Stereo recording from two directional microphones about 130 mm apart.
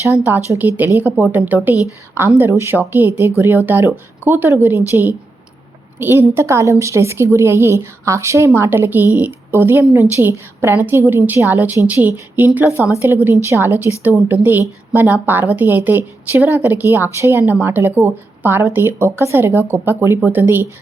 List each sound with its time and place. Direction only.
0.1 s a woman's voice: 15° right (ahead or behind)